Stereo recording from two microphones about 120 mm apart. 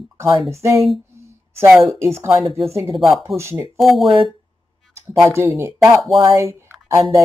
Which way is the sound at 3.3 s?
25° right (ahead or behind).